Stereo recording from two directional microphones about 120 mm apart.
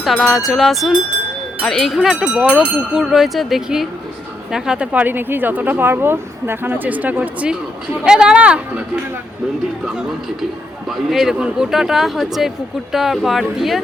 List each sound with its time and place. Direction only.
0.0 s speech: centre (ahead or behind)
9.8 s speech: 5° right (ahead or behind)